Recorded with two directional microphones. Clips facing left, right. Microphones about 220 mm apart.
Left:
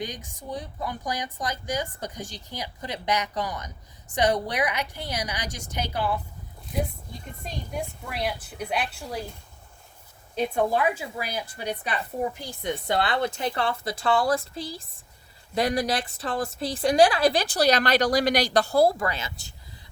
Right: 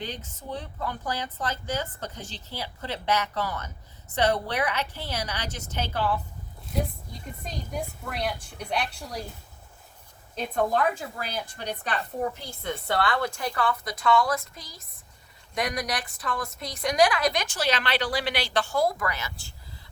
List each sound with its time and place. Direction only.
0.3 s a woman's voice: 15° left (ahead or behind)
8.0 s a woman's voice: 5° left (ahead or behind)
10.3 s a woman's voice: 5° left (ahead or behind); by 19.5 s 20° left (ahead or behind)